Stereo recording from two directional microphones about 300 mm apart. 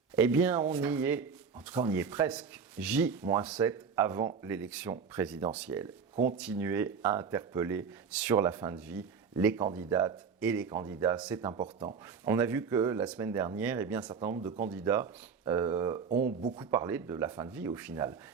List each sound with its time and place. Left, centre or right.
0.2 s speech: centre
16.0 s speech: right
16.6 s speech: centre